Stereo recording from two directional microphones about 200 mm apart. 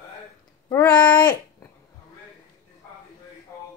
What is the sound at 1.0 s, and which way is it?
Speech, 20° left (ahead or behind).